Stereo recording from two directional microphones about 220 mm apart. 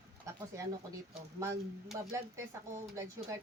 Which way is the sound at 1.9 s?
15° right (ahead or behind).